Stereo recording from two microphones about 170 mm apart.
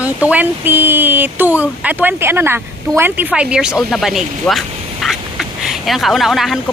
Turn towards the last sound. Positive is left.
turn(degrees=0)  # may be behind; listen again after turning